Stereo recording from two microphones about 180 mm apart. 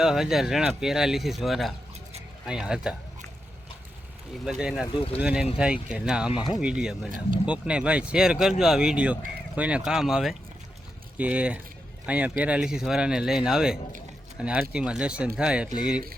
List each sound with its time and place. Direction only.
0.0 s speech: centre (ahead or behind)
4.4 s speech: 5° right (ahead or behind)
6.3 s speech: 25° left (ahead or behind)
6.6 s speech: 5° right (ahead or behind)